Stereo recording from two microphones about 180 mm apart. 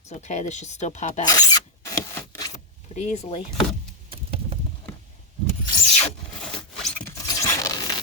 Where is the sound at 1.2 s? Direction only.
20° left (ahead or behind).